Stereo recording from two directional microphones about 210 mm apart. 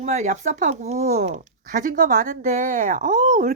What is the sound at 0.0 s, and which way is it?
Speech, 35° right (ahead or behind).